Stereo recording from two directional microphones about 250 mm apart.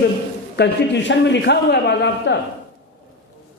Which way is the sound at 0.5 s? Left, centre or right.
Left.